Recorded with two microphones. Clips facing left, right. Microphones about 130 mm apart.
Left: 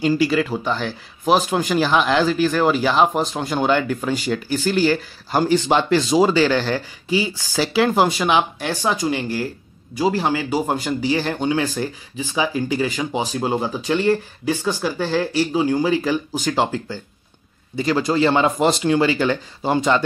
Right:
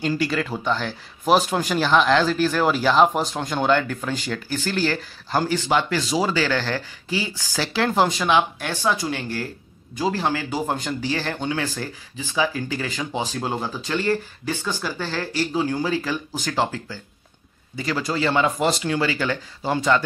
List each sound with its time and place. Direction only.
0.0 s speech: 5° left (ahead or behind)
5.7 s speech: 25° left (ahead or behind)